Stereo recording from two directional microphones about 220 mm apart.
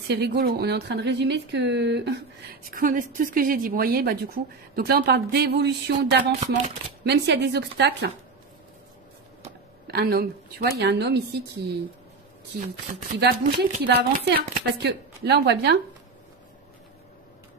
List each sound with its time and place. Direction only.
0.1 s speech: 45° right (ahead or behind)
9.8 s speech: 45° right (ahead or behind)
13.1 s speech: 45° right (ahead or behind)